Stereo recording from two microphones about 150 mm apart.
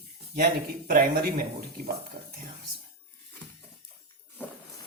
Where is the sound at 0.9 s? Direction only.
75° right (ahead or behind).